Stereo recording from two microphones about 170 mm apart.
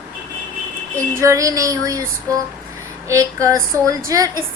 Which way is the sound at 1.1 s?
15° right (ahead or behind).